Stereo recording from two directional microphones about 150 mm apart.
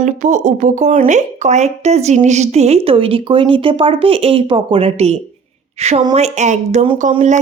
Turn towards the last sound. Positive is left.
turn(degrees=-55)  # may be behind; listen again after turning